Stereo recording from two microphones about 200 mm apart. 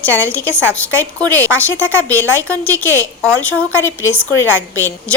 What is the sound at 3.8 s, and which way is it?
Speech, 80° left.